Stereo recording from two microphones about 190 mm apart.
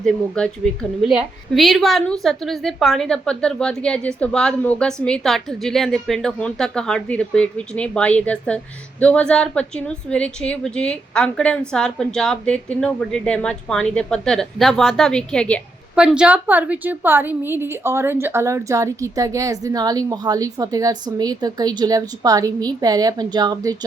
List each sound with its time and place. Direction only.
0.0 s a woman's voice: 5° left (ahead or behind)
16.0 s a woman's voice: 5° right (ahead or behind); by 23.7 s 20° right (ahead or behind)